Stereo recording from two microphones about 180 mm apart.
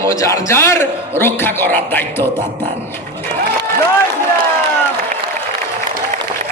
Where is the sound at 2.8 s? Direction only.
15° left (ahead or behind).